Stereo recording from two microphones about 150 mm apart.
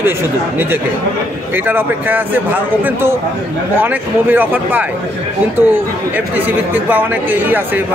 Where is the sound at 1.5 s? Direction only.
15° right (ahead or behind).